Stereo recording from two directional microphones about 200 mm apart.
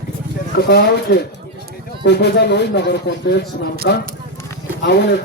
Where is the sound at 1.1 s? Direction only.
55° left (ahead or behind).